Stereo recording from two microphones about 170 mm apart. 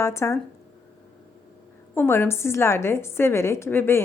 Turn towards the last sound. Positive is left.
turn(degrees=15)  # may be behind; listen again after turning